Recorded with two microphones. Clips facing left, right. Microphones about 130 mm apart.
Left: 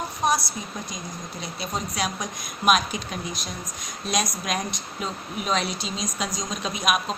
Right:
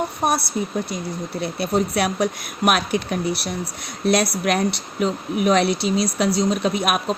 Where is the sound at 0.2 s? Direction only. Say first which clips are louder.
Right 2 dB; 60° right (ahead or behind).